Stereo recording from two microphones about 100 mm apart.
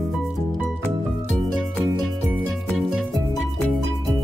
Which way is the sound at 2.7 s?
Centre (ahead or behind).